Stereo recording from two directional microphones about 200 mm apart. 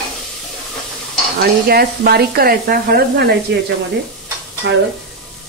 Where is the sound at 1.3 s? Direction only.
50° right (ahead or behind).